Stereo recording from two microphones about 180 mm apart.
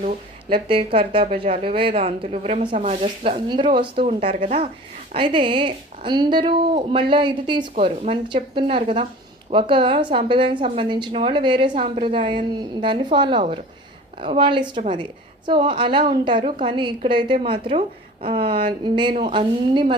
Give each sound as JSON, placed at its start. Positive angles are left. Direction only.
{"t": 0.5, "sound": "a woman's voice", "side_deg": -30}